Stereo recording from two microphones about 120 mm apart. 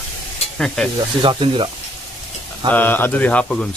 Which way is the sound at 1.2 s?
45° right (ahead or behind).